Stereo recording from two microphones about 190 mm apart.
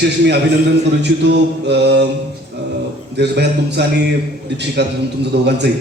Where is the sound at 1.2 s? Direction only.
65° right (ahead or behind).